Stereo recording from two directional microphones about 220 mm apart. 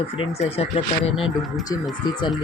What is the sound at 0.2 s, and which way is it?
Speech, 25° left (ahead or behind).